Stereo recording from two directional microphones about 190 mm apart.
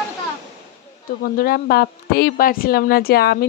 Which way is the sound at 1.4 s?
50° left (ahead or behind).